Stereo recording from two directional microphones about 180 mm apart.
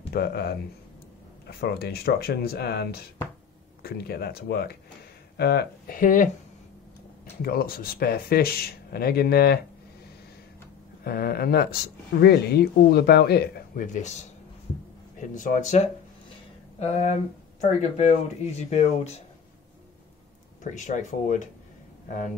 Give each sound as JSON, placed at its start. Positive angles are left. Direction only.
{"t": 0.1, "sound": "speech", "side_deg": 60}
{"t": 7.4, "sound": "speech", "side_deg": 55}
{"t": 11.1, "sound": "speech", "side_deg": 55}
{"t": 13.8, "sound": "speech", "side_deg": 40}
{"t": 15.1, "sound": "speech", "side_deg": 45}
{"t": 20.6, "sound": "speech", "side_deg": 45}